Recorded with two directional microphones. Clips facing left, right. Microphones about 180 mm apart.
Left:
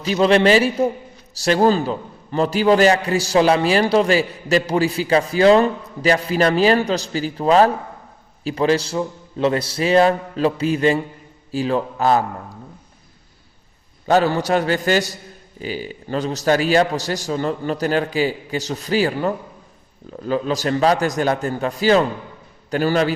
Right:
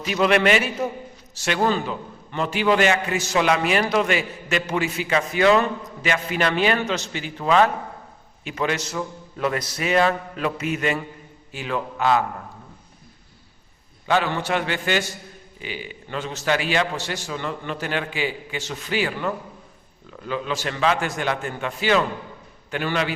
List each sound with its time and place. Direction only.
0.0 s a man's voice: 30° left (ahead or behind)
14.1 s a man's voice: 40° left (ahead or behind)